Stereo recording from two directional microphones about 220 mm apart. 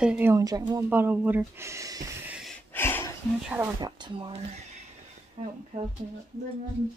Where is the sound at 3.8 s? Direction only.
20° right (ahead or behind).